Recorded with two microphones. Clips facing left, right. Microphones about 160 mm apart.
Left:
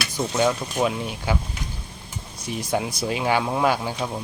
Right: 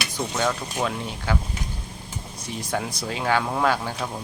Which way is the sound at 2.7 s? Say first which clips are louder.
Left 4 dB; 15° left (ahead or behind).